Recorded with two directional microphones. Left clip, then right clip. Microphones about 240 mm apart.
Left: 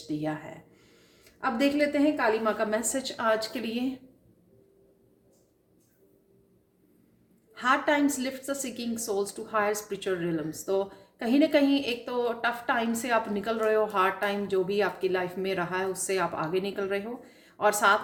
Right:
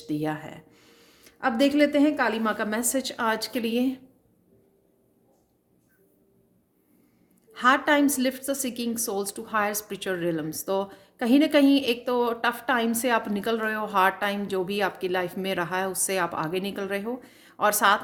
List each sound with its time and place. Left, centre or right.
0.1 s a woman's voice: right
7.5 s a woman's voice: right